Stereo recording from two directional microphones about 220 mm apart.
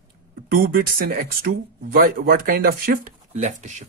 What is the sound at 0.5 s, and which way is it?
Speech, 45° right (ahead or behind).